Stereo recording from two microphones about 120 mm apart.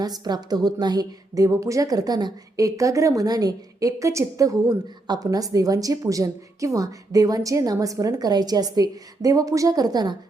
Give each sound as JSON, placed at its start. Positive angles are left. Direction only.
{"t": 0.0, "sound": "a woman's voice", "side_deg": -35}